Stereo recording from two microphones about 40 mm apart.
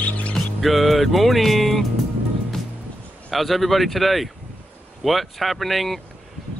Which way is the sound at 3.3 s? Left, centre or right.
Centre.